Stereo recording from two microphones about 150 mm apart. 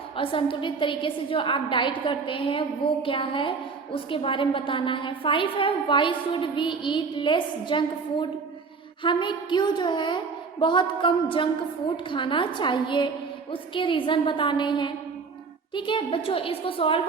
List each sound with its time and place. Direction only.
0.2 s a woman's voice: 35° left (ahead or behind)